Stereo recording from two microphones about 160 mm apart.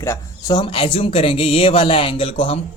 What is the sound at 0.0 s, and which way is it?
Speech, 20° left (ahead or behind).